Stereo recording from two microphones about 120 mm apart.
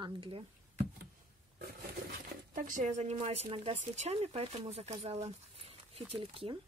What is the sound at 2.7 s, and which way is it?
Speech, 80° right.